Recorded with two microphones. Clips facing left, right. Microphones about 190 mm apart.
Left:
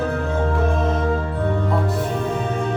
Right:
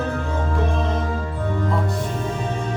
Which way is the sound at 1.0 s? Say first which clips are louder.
Left 4 dB; 60° left (ahead or behind).